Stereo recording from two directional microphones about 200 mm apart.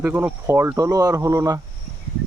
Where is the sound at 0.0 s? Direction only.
10° right (ahead or behind).